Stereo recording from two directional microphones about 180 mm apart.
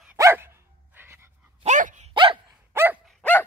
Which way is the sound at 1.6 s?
45° right (ahead or behind).